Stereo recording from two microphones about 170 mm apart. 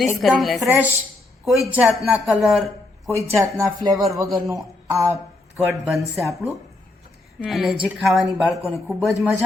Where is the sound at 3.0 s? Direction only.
15° right (ahead or behind).